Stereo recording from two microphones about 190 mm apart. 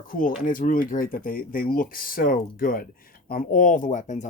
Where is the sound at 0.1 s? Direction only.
45° left (ahead or behind).